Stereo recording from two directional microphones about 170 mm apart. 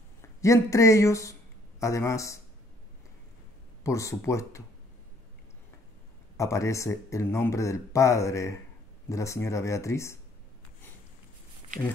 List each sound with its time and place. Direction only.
0.4 s speech: 20° left (ahead or behind)
3.8 s speech: 20° left (ahead or behind)
6.3 s speech: 20° left (ahead or behind)